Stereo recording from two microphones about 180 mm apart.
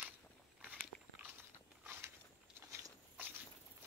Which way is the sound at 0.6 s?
5° right (ahead or behind).